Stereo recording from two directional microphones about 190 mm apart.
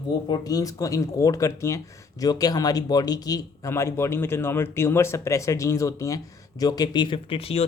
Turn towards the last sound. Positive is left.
turn(degrees=30)  # may be behind; listen again after turning